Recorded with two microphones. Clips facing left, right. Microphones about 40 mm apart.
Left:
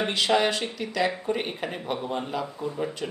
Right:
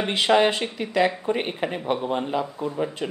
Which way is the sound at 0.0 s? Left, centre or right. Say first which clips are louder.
Right 4 dB; right.